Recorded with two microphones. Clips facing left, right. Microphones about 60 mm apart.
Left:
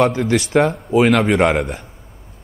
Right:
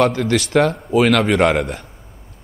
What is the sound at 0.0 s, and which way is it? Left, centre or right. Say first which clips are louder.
Speech: even; centre.